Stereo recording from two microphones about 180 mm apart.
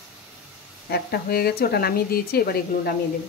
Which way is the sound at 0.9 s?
60° left (ahead or behind).